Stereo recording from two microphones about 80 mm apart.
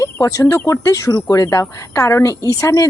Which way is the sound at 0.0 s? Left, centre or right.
Left.